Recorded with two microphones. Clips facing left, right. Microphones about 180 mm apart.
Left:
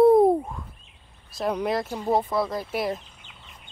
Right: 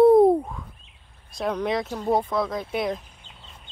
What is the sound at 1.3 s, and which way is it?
Speech, 5° left (ahead or behind).